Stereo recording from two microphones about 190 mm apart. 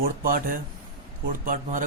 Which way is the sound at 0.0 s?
45° right (ahead or behind).